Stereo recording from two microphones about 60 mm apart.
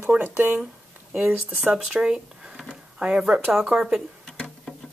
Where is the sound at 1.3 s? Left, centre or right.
Right.